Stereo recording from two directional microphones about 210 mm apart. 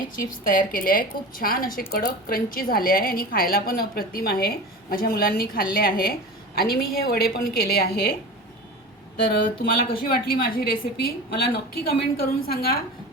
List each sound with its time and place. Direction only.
0.2 s a woman's voice: 40° left (ahead or behind)
9.3 s a woman's voice: 45° left (ahead or behind)